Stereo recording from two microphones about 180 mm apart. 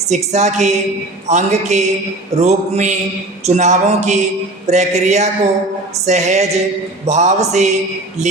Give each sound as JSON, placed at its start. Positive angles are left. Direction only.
{"t": 0.1, "sound": "speech", "side_deg": -40}